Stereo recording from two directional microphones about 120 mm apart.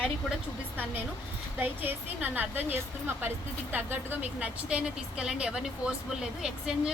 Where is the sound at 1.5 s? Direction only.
15° right (ahead or behind).